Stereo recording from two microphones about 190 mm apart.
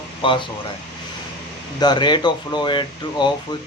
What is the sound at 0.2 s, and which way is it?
Speech, 25° left (ahead or behind).